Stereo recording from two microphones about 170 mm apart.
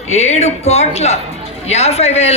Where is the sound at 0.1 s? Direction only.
40° left (ahead or behind).